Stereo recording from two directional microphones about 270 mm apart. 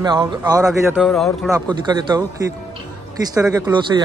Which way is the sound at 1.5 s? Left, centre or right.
Centre.